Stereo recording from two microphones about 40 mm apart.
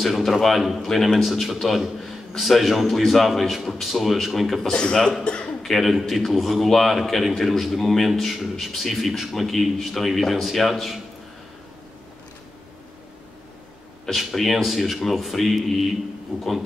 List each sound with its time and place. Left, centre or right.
0.0 s a man's voice: centre
5.2 s a man's voice: left
5.6 s a man's voice: centre
14.1 s a man's voice: centre